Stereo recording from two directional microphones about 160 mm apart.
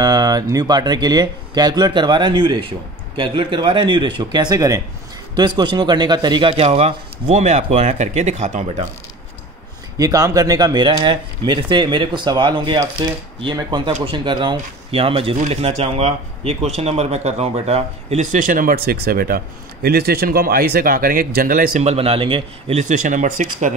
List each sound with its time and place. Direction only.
0.0 s a man's voice: 25° right (ahead or behind); by 8.8 s 50° right (ahead or behind)
9.9 s a man's voice: 20° right (ahead or behind); by 23.7 s 55° right (ahead or behind)